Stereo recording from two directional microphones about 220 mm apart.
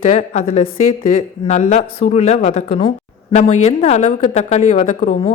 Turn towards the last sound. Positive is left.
turn(degrees=30)  # may be behind; listen again after turning